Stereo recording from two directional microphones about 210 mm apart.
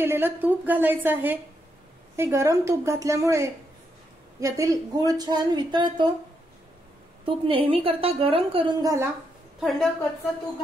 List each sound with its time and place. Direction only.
0.0 s a woman's voice: 10° right (ahead or behind)
7.2 s a woman's voice: 25° right (ahead or behind)
9.6 s a woman's voice: centre (ahead or behind)